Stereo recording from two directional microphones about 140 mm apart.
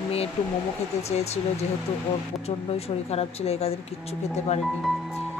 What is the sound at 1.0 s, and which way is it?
Speech, 50° left (ahead or behind).